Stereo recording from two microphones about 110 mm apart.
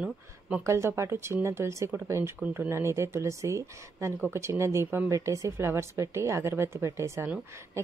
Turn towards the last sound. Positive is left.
turn(degrees=-25)  # may be behind; listen again after turning